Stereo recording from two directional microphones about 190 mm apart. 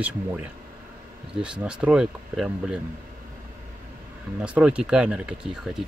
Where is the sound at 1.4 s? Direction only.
5° right (ahead or behind).